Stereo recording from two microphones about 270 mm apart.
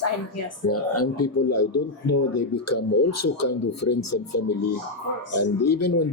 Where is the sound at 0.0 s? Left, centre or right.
Left.